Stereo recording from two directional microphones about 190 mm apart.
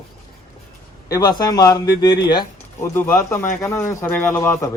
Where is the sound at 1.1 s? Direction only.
20° left (ahead or behind).